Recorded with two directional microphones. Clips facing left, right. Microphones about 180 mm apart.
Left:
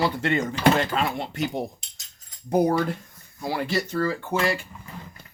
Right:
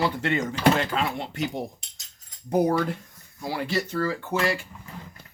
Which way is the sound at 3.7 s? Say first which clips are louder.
Even; 35° left (ahead or behind).